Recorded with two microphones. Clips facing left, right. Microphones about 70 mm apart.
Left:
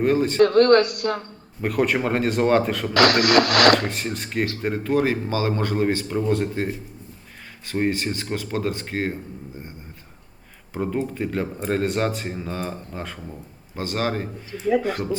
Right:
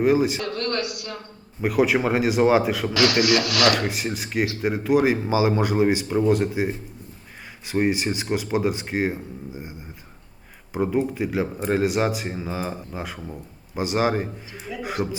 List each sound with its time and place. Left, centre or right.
0.0 s speech: centre
0.3 s radio: left
1.6 s speech: centre
2.9 s radio: left
3.8 s speech: centre
10.8 s speech: centre